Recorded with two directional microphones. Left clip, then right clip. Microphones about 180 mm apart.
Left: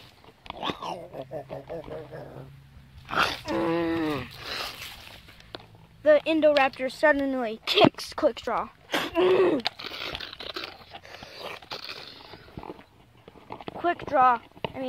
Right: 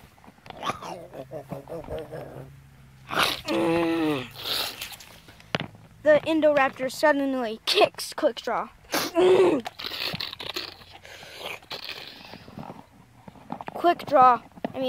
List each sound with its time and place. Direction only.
0.6 s dog: 10° left (ahead or behind)
2.1 s dog: 10° right (ahead or behind)
3.1 s a sound: 10° right (ahead or behind)
3.5 s a sound: 25° right (ahead or behind)
6.0 s speech: 5° right (ahead or behind)
9.1 s sneeze: 25° right (ahead or behind)
9.8 s crumpling: centre (ahead or behind)
10.6 s biting: centre (ahead or behind)
13.7 s speech: 40° right (ahead or behind)